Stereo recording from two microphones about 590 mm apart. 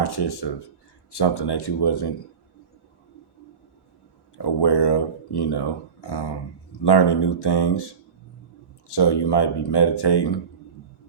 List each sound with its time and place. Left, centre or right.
0.0 s speech: left
4.4 s speech: left
8.9 s speech: left